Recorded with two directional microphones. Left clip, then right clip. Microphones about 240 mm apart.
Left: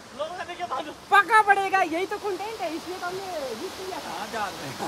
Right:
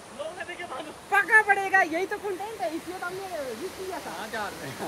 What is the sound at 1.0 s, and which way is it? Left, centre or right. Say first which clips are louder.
Speech: left 2 dB; centre.